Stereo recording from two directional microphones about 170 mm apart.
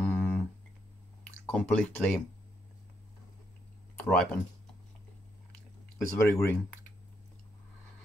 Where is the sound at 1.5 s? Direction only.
10° left (ahead or behind).